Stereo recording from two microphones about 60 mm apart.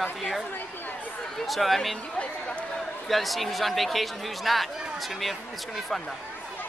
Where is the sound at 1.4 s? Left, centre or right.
Centre.